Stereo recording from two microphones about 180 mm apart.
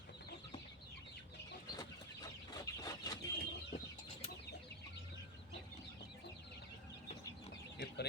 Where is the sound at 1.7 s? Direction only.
20° left (ahead or behind).